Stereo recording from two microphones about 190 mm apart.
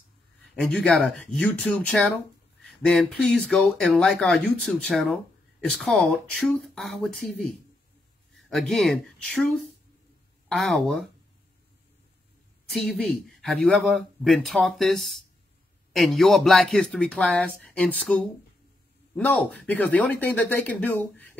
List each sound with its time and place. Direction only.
0.7 s speech: 5° left (ahead or behind)
12.6 s speech: centre (ahead or behind)